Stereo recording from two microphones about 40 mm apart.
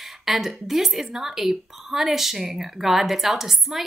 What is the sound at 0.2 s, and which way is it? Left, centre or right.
A woman's voice, centre.